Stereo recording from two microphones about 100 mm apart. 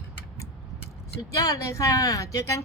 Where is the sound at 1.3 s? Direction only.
30° left (ahead or behind).